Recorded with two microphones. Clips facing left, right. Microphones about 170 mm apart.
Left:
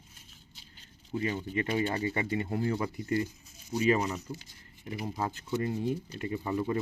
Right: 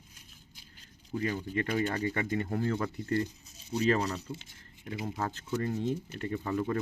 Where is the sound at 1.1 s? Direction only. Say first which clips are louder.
Even; 15° left (ahead or behind).